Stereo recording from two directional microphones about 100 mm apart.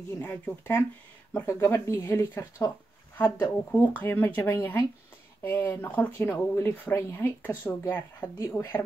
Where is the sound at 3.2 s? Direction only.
35° left (ahead or behind).